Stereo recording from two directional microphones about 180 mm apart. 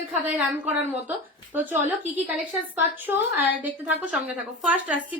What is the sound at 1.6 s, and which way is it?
Speech, 45° right (ahead or behind).